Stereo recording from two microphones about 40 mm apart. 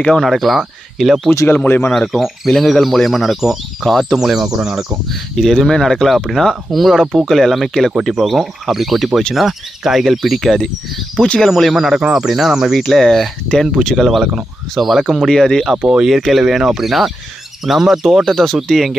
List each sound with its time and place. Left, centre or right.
0.2 s speech: centre
1.5 s speech: left
2.1 s speech: centre
4.2 s speech: centre
5.1 s speech: centre
11.1 s speech: left
11.4 s speech: centre
11.7 s speech: centre
12.7 s speech: centre
15.2 s speech: centre
15.8 s speech: right
16.3 s speech: centre
18.2 s speech: centre